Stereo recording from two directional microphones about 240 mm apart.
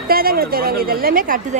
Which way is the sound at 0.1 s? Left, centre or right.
Right.